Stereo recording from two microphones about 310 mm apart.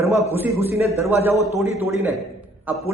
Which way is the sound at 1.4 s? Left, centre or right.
Centre.